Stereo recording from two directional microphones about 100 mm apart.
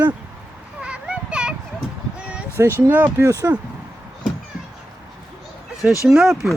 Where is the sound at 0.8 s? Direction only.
10° right (ahead or behind).